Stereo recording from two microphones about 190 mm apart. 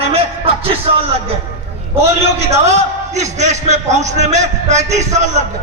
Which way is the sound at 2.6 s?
35° right (ahead or behind).